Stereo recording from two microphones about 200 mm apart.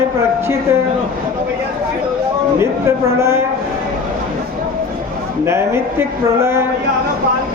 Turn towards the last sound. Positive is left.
turn(degrees=-15)  # may be behind; listen again after turning